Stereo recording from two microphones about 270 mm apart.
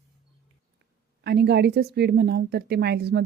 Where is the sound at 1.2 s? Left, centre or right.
Right.